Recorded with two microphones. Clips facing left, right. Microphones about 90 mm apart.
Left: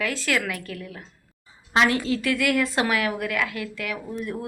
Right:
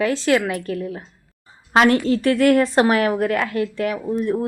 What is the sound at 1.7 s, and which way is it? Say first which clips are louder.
A woman's voice: right 6 dB; 45° right (ahead or behind).